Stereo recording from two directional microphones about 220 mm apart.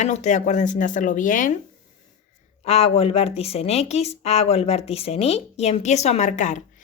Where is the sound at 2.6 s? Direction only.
25° left (ahead or behind).